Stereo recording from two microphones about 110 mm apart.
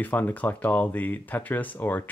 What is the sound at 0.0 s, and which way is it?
Speech, 15° left (ahead or behind).